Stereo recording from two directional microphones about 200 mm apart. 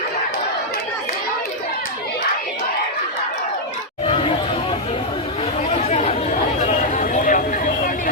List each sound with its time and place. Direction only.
4.0 s chatter: 25° left (ahead or behind)
5.7 s chatter: 35° left (ahead or behind)
6.6 s a sound: 35° left (ahead or behind)